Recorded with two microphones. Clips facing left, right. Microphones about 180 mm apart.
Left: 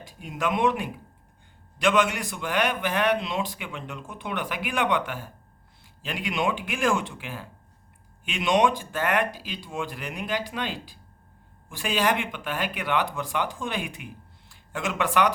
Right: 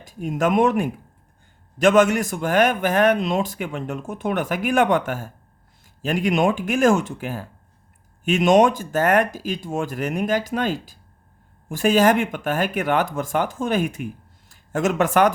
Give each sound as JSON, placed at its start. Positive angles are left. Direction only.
{"t": 0.0, "sound": "speech", "side_deg": -45}